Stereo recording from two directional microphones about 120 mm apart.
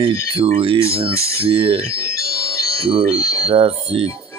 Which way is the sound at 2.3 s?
25° left (ahead or behind).